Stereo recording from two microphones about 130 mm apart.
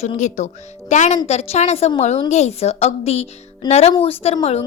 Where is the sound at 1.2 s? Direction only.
55° left (ahead or behind).